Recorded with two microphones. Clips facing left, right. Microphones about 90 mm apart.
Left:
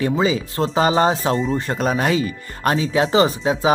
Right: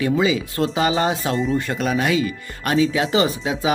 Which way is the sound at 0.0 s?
35° left (ahead or behind).